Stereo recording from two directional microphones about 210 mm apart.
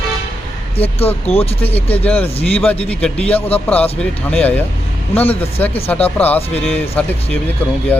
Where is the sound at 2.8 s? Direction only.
5° left (ahead or behind).